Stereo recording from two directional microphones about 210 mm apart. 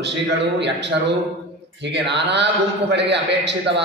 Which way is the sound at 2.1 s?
55° right (ahead or behind).